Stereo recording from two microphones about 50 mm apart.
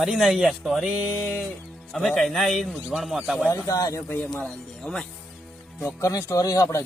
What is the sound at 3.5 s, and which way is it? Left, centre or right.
Speech, left.